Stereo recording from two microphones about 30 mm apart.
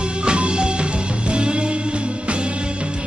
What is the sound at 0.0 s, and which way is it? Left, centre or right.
Music, right.